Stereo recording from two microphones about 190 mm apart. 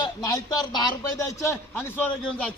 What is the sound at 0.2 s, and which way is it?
A man's voice, 20° left (ahead or behind).